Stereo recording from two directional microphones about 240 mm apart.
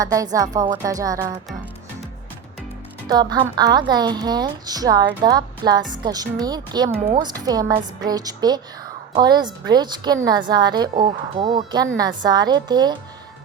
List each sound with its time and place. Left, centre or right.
0.0 s a woman's voice: centre
3.1 s a woman's voice: centre